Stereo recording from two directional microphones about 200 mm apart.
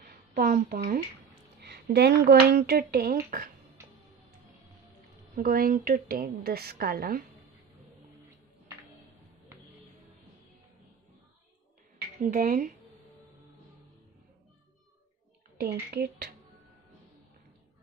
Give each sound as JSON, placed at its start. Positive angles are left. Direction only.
{"t": 0.0, "sound": "a sound", "side_deg": -50}
{"t": 1.6, "sound": "speech", "side_deg": -55}
{"t": 5.3, "sound": "a woman's voice", "side_deg": -45}
{"t": 12.2, "sound": "a woman's voice", "side_deg": -45}
{"t": 15.9, "sound": "a woman's voice", "side_deg": -50}